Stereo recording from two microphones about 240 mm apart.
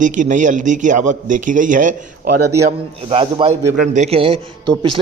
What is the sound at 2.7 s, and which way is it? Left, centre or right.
A man's voice, right.